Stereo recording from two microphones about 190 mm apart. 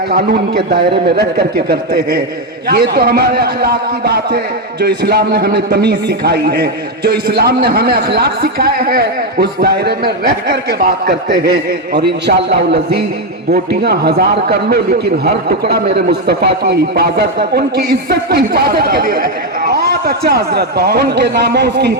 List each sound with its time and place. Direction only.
0.1 s a man's voice: 50° right (ahead or behind)